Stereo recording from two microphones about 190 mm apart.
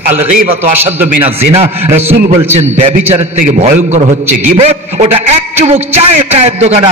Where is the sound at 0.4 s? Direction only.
40° right (ahead or behind).